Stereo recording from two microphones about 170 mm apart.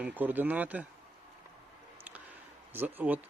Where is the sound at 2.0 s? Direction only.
10° right (ahead or behind).